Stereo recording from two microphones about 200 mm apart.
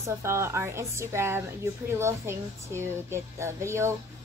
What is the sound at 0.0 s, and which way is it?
A woman's voice, 15° right (ahead or behind).